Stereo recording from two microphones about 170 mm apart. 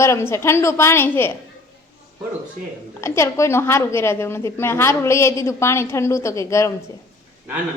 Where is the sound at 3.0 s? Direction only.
15° left (ahead or behind).